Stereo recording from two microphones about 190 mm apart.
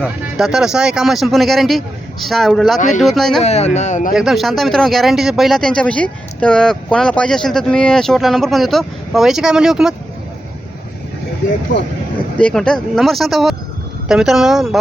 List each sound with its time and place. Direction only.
0.0 s speech: centre (ahead or behind)
2.7 s speech: 40° left (ahead or behind)
3.0 s speech: centre (ahead or behind)
3.4 s speech: 35° left (ahead or behind)
4.1 s speech: centre (ahead or behind)
12.4 s speech: 5° left (ahead or behind)